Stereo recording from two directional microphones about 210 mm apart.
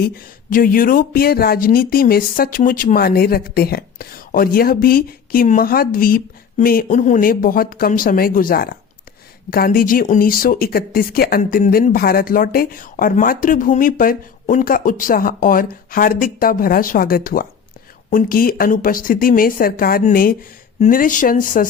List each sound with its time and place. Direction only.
0.5 s speech: 40° left (ahead or behind)